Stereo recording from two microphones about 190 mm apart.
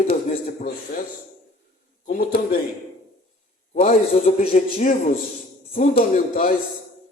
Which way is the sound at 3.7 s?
40° left (ahead or behind).